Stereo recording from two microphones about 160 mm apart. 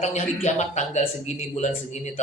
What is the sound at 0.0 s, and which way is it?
A man's voice, 45° left (ahead or behind).